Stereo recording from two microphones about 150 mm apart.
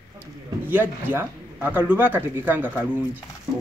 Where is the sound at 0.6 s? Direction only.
15° right (ahead or behind).